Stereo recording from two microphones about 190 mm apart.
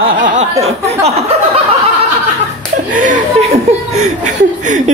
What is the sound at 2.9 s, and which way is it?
A woman's voice, 45° right (ahead or behind).